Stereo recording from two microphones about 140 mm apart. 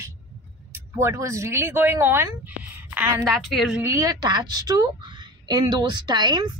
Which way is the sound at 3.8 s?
25° right (ahead or behind).